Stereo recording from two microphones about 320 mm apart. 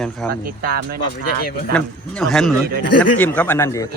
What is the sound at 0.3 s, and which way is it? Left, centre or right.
Speech, right.